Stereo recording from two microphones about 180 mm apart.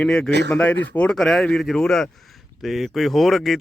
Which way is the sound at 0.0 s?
5° left (ahead or behind).